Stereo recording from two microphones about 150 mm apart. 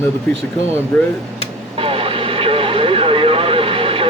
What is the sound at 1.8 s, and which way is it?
Vehicle, 40° right (ahead or behind).